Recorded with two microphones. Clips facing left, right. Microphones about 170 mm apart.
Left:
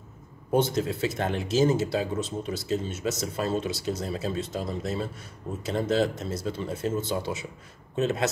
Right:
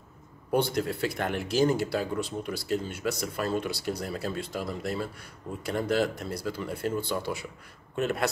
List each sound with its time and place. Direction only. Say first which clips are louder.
0.5 s a man's voice: left 2 dB; 20° left (ahead or behind)